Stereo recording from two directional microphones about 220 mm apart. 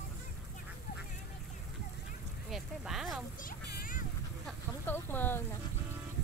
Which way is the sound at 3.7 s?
40° left (ahead or behind).